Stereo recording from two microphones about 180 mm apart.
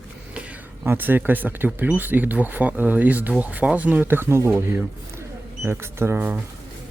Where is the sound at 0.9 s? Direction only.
10° right (ahead or behind).